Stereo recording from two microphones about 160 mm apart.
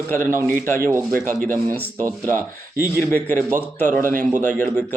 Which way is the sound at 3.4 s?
15° right (ahead or behind).